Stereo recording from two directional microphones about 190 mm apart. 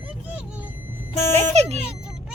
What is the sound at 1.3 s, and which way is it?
Speech, 35° right (ahead or behind).